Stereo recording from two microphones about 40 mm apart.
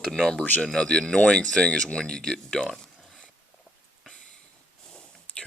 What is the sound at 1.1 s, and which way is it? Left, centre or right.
Speech, left.